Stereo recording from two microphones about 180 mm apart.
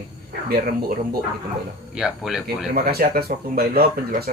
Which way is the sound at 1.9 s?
5° right (ahead or behind).